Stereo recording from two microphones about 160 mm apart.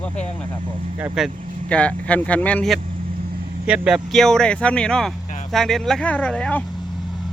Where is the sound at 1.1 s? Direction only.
5° left (ahead or behind).